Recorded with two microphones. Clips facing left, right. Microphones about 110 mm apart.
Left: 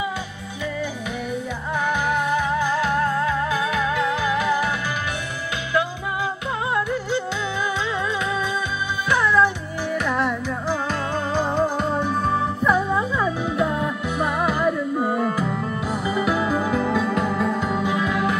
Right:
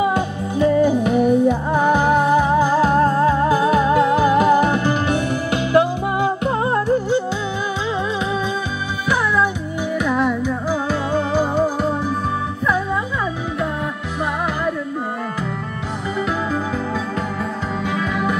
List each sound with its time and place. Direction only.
0.6 s music: 40° right (ahead or behind)
10.0 s music: 5° right (ahead or behind)
16.2 s music: 5° left (ahead or behind)